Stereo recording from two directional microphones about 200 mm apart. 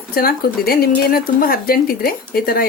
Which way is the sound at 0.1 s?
50° left (ahead or behind).